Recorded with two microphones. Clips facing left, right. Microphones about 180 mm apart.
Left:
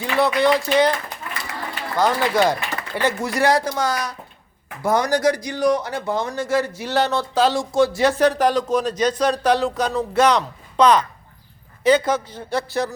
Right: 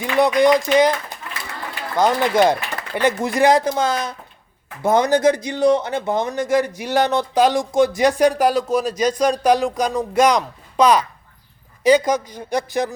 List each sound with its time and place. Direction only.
0.3 s speech: 15° right (ahead or behind)
2.0 s speech: 20° right (ahead or behind)